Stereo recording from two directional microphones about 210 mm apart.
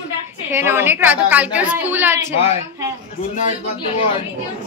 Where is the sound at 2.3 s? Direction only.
30° left (ahead or behind).